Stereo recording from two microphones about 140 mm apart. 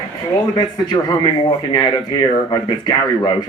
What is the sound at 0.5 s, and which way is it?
A man's voice, 30° left (ahead or behind).